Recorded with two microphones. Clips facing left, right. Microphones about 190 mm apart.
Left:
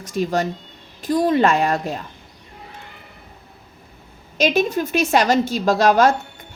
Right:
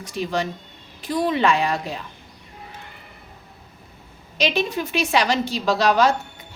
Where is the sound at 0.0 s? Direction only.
45° left (ahead or behind).